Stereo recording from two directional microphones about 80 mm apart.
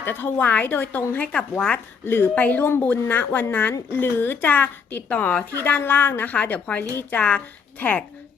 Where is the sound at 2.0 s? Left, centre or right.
Left.